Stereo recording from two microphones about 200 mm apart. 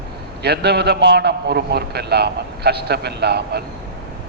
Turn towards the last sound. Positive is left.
turn(degrees=-55)  # may be behind; listen again after turning